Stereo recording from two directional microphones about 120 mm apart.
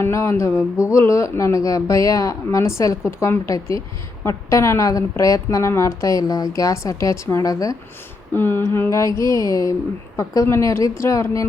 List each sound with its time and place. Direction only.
0.0 s speech: 20° left (ahead or behind)
8.3 s speech: 20° left (ahead or behind)